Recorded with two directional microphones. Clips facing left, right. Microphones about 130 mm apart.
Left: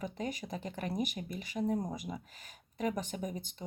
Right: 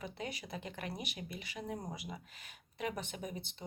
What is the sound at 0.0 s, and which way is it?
Speech, 45° left (ahead or behind).